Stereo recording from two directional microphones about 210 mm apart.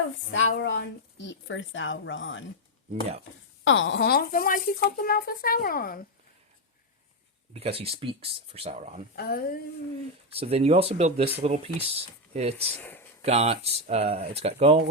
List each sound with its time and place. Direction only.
0.3 s speech: 65° left (ahead or behind)
3.6 s speech: 65° left (ahead or behind); by 6.0 s 45° left (ahead or behind)
7.5 s speech: 25° right (ahead or behind)
9.1 s speech: 50° left (ahead or behind)
10.2 s speech: 30° right (ahead or behind)
12.7 s speech: 10° left (ahead or behind)
13.2 s speech: 30° right (ahead or behind)